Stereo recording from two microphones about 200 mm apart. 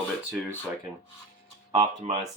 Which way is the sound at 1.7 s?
30° right (ahead or behind).